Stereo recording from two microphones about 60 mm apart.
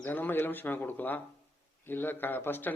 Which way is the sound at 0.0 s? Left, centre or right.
Left.